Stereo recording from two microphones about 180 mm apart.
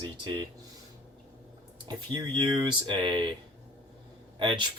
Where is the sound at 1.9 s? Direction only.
25° right (ahead or behind).